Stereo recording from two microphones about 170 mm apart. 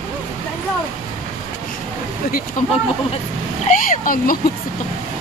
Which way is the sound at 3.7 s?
55° left (ahead or behind).